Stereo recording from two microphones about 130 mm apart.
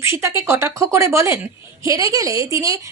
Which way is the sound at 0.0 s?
20° right (ahead or behind).